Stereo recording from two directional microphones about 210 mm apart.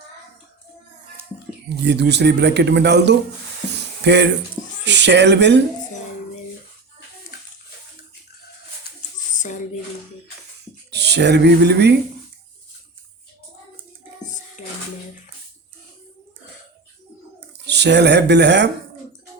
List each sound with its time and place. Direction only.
1.7 s speech: 55° right (ahead or behind)
9.3 s a sound: 35° left (ahead or behind)
10.9 s speech: 55° right (ahead or behind)
17.7 s speech: 55° right (ahead or behind)